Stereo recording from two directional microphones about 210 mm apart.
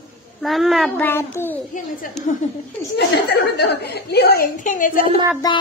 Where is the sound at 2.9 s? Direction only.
50° left (ahead or behind).